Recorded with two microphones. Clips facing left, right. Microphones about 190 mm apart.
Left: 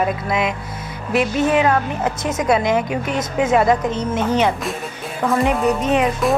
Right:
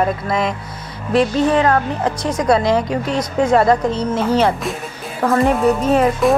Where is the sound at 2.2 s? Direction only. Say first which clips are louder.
Right 2 dB; 20° left (ahead or behind).